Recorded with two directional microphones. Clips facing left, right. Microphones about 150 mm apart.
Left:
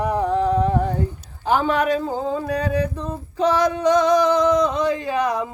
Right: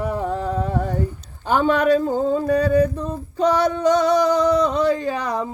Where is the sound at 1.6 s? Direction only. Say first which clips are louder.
Right 3 dB; 40° right (ahead or behind).